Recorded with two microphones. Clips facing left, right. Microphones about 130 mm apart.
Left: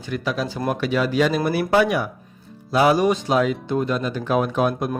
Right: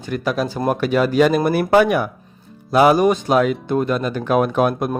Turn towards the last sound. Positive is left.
turn(degrees=-55)  # may be behind; listen again after turning